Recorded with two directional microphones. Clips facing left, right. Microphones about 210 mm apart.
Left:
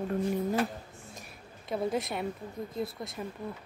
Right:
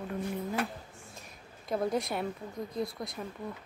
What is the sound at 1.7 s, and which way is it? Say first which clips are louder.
Speech: even; centre (ahead or behind).